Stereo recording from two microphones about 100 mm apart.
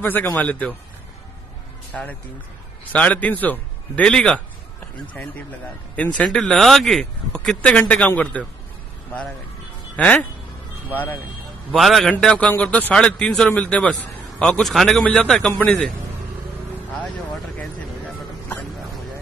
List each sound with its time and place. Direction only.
0.0 s speech: 20° left (ahead or behind)
2.9 s speech: 15° left (ahead or behind)
5.9 s speech: 10° left (ahead or behind)
9.9 s speech: 15° left (ahead or behind)
11.7 s a man's voice: centre (ahead or behind)